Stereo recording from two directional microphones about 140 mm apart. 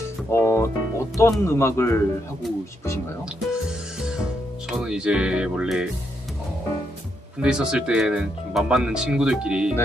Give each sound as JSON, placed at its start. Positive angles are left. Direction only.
{"t": 0.3, "sound": "speech", "side_deg": 20}
{"t": 4.0, "sound": "speech", "side_deg": -5}
{"t": 7.4, "sound": "speech", "side_deg": -5}